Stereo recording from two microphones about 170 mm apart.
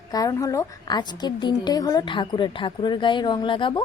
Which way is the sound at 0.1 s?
20° left (ahead or behind).